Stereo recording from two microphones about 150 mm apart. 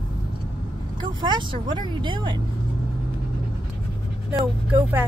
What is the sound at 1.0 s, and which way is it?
Speech, 30° right (ahead or behind).